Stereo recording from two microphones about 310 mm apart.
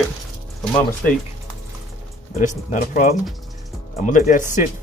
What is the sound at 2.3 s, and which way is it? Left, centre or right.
Speech, left.